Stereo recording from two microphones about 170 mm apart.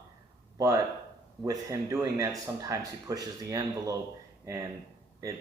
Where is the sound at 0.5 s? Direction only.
20° right (ahead or behind).